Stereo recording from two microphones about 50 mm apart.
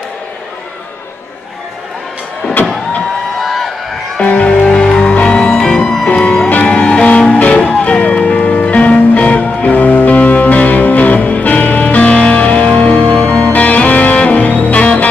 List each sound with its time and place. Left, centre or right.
3.3 s a sound: centre
4.2 s music: left
4.6 s music: centre
5.0 s music: left
13.5 s music: left